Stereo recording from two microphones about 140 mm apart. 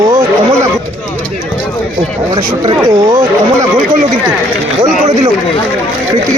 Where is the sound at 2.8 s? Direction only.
20° right (ahead or behind).